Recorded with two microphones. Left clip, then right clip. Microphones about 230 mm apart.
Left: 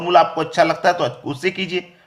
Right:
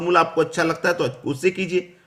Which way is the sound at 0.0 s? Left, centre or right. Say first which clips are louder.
Left 3 dB; centre.